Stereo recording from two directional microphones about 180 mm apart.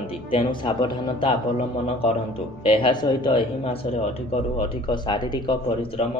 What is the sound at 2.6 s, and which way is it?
A man's voice, 25° left (ahead or behind).